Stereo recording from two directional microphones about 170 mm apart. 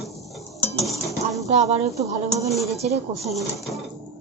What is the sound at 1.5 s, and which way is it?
Speech, 40° right (ahead or behind).